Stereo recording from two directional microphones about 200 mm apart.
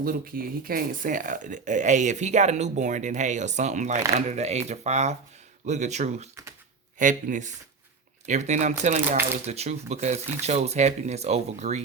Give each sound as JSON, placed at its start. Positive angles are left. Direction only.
{"t": 0.0, "sound": "speech", "side_deg": -45}